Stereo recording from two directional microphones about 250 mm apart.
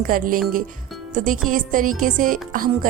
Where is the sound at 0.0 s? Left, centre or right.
Right.